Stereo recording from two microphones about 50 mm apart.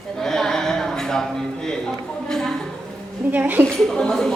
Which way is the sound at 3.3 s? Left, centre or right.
Right.